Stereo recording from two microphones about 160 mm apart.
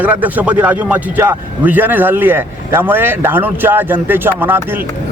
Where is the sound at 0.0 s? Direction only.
10° right (ahead or behind).